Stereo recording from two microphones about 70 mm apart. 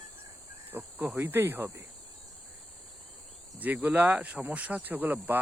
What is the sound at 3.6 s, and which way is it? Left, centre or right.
Speech, right.